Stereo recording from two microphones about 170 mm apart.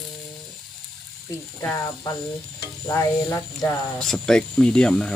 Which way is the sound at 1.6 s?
15° left (ahead or behind).